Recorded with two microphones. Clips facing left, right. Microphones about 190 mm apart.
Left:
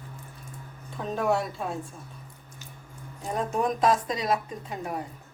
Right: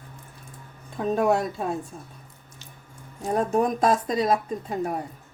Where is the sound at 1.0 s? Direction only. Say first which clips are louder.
Right 5 dB; 45° right (ahead or behind).